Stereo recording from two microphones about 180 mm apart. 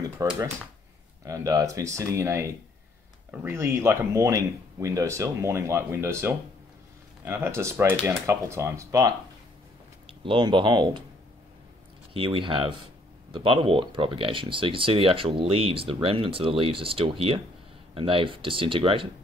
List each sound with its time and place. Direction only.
0.2 s speech: 20° right (ahead or behind)
10.2 s speech: 25° right (ahead or behind)
12.1 s speech: 30° right (ahead or behind)